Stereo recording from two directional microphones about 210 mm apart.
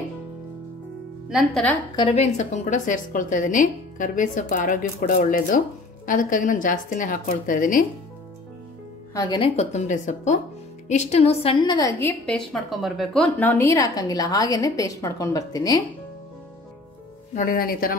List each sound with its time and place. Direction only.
1.3 s speech: 5° left (ahead or behind)
2.0 s a woman's voice: 30° left (ahead or behind)
9.1 s a woman's voice: 20° left (ahead or behind)
17.4 s speech: 45° left (ahead or behind)